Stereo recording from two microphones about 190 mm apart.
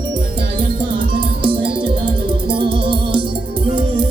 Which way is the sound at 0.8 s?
25° right (ahead or behind).